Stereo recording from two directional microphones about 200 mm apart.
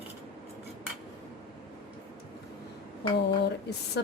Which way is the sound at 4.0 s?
55° left (ahead or behind).